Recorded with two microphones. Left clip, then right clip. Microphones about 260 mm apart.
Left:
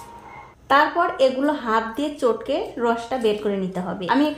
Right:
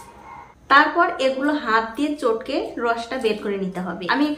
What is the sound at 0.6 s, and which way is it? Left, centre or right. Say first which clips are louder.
A woman's voice: right 2 dB; left.